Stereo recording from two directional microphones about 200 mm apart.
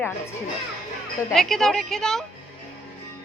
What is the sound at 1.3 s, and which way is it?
Speech, centre (ahead or behind).